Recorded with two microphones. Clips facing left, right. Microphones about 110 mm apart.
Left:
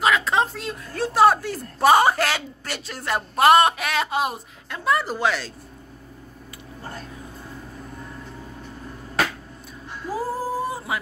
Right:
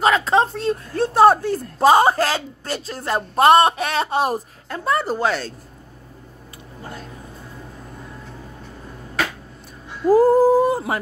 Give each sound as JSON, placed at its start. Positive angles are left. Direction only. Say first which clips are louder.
{"t": 0.0, "sound": "speech", "louder": "right 4 dB", "side_deg": -35}
{"t": 1.8, "sound": "speech", "louder": "right 2 dB", "side_deg": -30}
{"t": 10.1, "sound": "a sound", "louder": "right 13 dB", "side_deg": -55}